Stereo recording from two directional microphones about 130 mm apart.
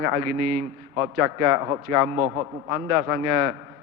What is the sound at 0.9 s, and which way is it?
A man's voice, 25° right (ahead or behind).